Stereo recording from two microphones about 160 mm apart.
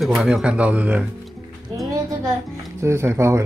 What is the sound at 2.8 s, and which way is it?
Speech, 15° right (ahead or behind).